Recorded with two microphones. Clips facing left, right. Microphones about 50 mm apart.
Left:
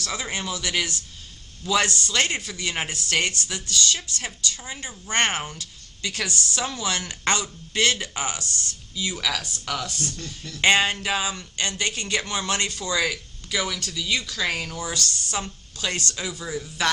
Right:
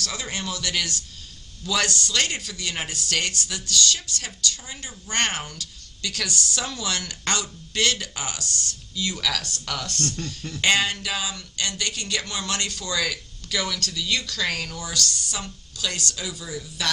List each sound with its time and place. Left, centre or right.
0.0 s speech: left
9.0 s speech: centre
10.6 s speech: left